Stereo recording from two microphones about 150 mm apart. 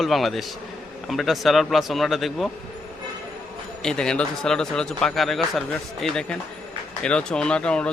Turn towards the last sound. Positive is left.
turn(degrees=5)  # may be behind; listen again after turning